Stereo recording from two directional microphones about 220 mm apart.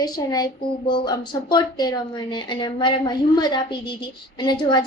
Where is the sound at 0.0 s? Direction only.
15° left (ahead or behind).